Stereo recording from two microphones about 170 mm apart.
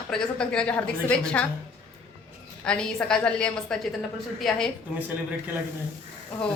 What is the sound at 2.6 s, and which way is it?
A woman's voice, 5° left (ahead or behind).